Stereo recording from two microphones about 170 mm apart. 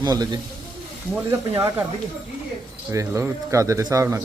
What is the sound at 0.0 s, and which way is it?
Speech, 25° right (ahead or behind).